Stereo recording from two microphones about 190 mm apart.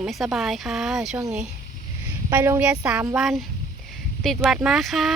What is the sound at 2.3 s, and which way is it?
Speech, 10° right (ahead or behind).